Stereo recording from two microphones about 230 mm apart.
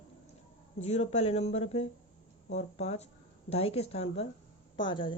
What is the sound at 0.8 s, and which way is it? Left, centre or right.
A woman's voice, left.